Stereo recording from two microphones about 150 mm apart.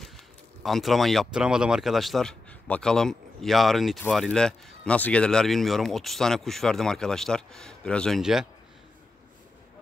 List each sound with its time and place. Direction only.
0.7 s speech: centre (ahead or behind)